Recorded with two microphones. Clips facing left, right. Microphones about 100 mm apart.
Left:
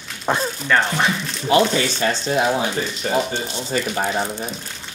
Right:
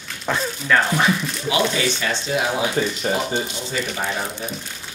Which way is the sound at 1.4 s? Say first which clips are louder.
Left 4 dB; 45° left (ahead or behind).